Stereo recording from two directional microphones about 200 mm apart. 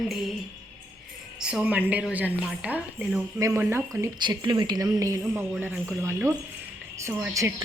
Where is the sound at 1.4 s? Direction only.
5° right (ahead or behind).